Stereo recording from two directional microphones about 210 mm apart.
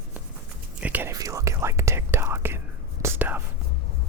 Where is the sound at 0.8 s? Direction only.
10° right (ahead or behind).